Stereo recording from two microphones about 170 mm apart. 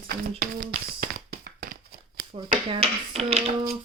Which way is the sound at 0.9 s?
60° right (ahead or behind).